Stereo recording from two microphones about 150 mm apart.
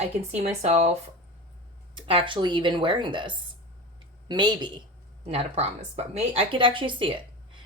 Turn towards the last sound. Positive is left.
turn(degrees=-35)  # may be behind; listen again after turning